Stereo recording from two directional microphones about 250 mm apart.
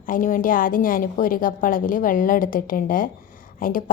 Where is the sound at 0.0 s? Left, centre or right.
Left.